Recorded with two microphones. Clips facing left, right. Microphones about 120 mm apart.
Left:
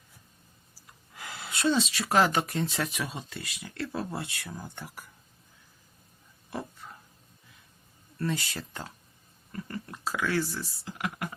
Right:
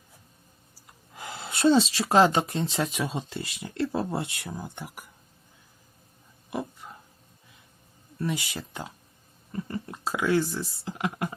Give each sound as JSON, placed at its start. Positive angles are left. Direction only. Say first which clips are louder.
{"t": 1.1, "sound": "speech", "louder": "right 3 dB", "side_deg": -25}
{"t": 6.5, "sound": "a sound", "louder": "right 4 dB", "side_deg": -15}
{"t": 8.2, "sound": "speech", "louder": "right 1 dB", "side_deg": -15}